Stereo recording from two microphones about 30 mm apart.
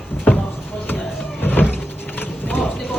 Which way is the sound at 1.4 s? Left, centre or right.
Left.